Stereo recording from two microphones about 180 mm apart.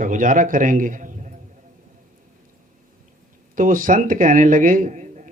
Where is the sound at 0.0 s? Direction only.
45° right (ahead or behind).